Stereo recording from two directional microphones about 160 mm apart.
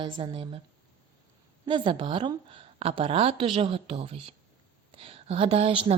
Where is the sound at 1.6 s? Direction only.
30° right (ahead or behind).